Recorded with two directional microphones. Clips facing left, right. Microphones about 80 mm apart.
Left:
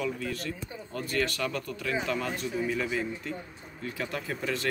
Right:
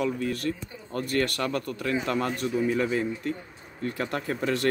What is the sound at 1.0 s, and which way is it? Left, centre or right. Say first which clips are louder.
Speech: right 3 dB; right.